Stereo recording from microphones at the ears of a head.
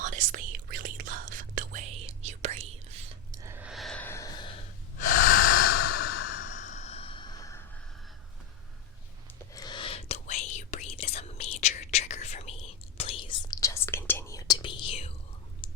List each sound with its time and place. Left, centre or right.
0.0 s whispering: right
4.4 s breathing: left
9.6 s whispering: left